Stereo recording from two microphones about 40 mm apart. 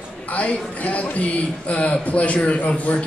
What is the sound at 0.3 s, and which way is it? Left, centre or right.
A man's voice, left.